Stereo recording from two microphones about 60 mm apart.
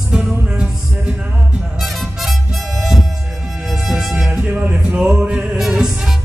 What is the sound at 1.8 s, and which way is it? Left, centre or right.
Music, centre.